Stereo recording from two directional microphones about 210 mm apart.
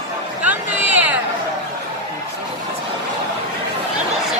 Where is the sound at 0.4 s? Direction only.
5° right (ahead or behind).